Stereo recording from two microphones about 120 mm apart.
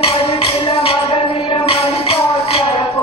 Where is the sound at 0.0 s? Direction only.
50° left (ahead or behind).